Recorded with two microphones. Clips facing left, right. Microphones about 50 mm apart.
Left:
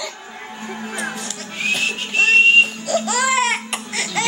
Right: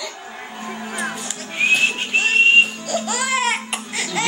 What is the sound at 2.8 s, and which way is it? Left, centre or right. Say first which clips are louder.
Baby cry: left 4 dB; centre.